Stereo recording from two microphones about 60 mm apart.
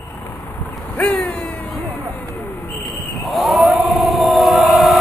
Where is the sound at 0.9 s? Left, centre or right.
Left.